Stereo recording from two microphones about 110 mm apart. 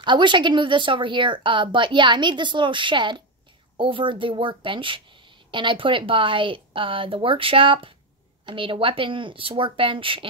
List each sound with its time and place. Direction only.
0.0 s a woman's voice: 45° right (ahead or behind)